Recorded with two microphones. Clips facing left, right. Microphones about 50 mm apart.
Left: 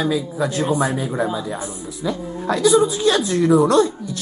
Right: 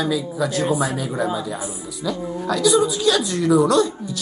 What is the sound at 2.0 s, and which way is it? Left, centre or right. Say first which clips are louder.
Speech: left 1 dB; left.